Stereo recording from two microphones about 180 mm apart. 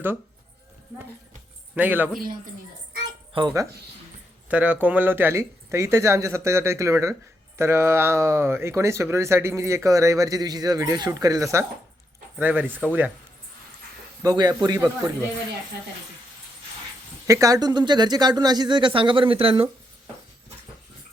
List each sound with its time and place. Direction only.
1.7 s speech: 10° right (ahead or behind)
3.3 s speech: 20° right (ahead or behind)
4.4 s speech: 10° right (ahead or behind)
14.2 s speech: 20° right (ahead or behind)
17.2 s speech: 15° right (ahead or behind)